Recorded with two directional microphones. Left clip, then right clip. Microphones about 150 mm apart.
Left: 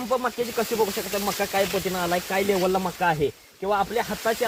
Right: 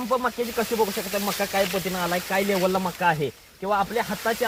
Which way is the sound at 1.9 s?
45° left (ahead or behind).